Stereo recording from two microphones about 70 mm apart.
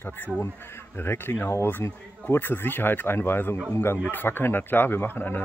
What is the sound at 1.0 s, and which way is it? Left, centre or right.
Speech, left.